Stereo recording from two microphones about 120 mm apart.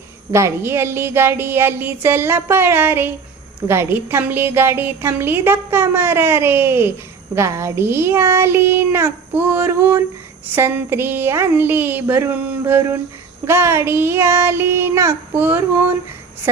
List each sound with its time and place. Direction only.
0.3 s a woman's voice: 20° right (ahead or behind)